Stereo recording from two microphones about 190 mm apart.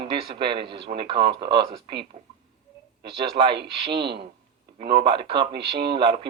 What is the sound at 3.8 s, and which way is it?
A man's voice, 25° right (ahead or behind).